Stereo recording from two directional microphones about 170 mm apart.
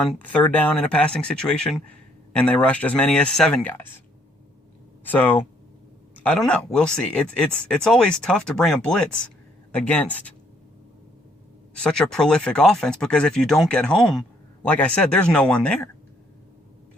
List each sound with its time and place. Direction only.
0.1 s speech: 10° left (ahead or behind)
5.0 s speech: 10° left (ahead or behind)
11.8 s speech: 5° left (ahead or behind)